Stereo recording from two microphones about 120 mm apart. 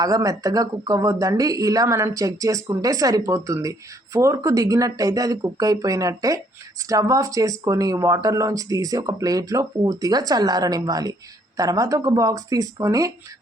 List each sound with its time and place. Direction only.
0.0 s speech: 30° right (ahead or behind)